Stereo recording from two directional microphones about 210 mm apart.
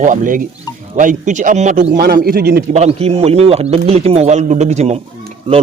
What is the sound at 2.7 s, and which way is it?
Speech, 30° right (ahead or behind).